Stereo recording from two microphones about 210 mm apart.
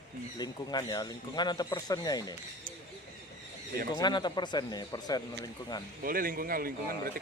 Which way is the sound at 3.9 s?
20° left (ahead or behind).